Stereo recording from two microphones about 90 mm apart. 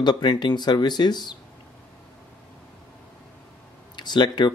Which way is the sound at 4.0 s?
55° left (ahead or behind).